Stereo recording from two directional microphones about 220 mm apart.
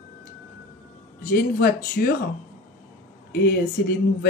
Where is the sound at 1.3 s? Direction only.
45° left (ahead or behind).